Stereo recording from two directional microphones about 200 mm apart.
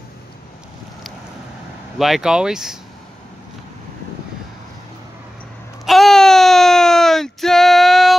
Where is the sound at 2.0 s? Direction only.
Centre (ahead or behind).